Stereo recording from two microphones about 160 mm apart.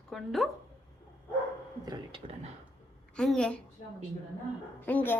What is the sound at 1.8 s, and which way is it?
Speech, 30° right (ahead or behind).